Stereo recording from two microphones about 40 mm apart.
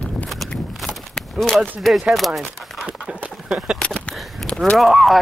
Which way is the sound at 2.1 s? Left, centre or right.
Centre.